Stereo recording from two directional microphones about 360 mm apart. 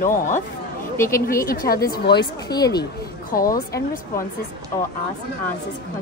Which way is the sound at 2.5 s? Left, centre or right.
Centre.